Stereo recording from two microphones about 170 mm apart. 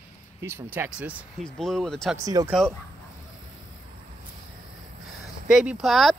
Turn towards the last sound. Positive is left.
turn(degrees=0)  # may be behind; listen again after turning